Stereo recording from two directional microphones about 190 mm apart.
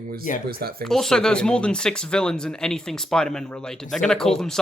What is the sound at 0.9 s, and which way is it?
Speech, centre (ahead or behind).